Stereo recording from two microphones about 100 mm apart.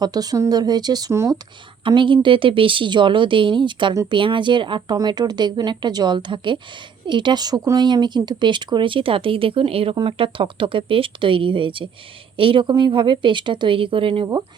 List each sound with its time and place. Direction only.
0.0 s speech: 40° right (ahead or behind)
1.8 s speech: 55° right (ahead or behind)